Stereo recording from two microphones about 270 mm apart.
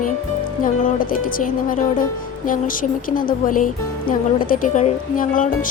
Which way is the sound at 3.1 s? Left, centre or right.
Left.